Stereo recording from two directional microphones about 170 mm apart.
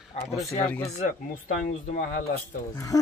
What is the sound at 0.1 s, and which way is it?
Speech, 40° left (ahead or behind).